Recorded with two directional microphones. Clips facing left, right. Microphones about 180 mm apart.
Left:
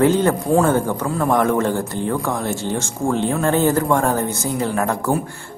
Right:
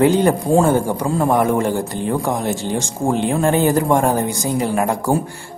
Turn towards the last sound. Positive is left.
turn(degrees=-15)  # may be behind; listen again after turning